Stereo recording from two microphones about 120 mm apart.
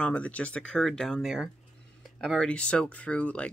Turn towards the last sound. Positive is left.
turn(degrees=10)  # may be behind; listen again after turning